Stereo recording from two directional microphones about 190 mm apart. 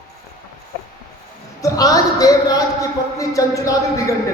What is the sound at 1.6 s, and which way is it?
Speech, 20° left (ahead or behind).